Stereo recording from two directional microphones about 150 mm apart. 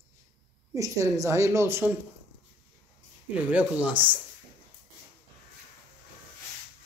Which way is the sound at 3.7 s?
10° right (ahead or behind).